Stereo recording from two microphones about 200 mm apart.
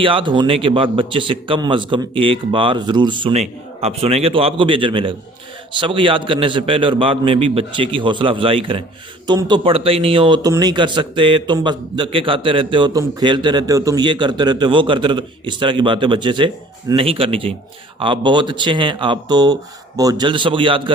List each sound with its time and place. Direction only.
0.0 s a man's voice: 25° right (ahead or behind)